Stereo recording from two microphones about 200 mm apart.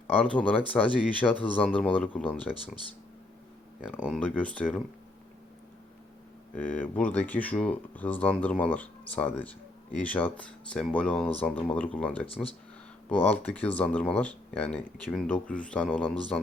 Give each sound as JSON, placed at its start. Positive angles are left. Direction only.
{"t": 0.1, "sound": "speech", "side_deg": 5}
{"t": 3.8, "sound": "speech", "side_deg": -5}
{"t": 4.2, "sound": "speech", "side_deg": 5}
{"t": 6.6, "sound": "speech", "side_deg": 10}
{"t": 12.2, "sound": "speech", "side_deg": 30}
{"t": 13.1, "sound": "speech", "side_deg": 10}